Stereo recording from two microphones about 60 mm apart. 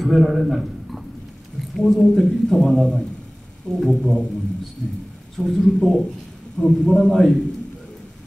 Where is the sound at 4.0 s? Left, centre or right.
Centre.